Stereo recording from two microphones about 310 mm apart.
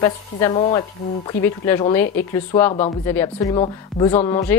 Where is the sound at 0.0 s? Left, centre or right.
Centre.